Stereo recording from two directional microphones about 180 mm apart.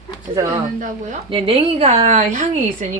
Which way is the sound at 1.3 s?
35° right (ahead or behind).